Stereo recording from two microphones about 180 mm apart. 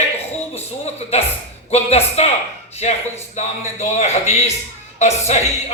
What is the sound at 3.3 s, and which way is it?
A woman's voice, 40° left (ahead or behind).